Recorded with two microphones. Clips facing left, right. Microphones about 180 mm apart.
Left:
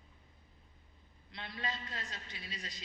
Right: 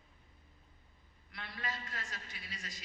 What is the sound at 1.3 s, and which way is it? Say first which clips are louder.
A man's voice: left 2 dB; 25° left (ahead or behind).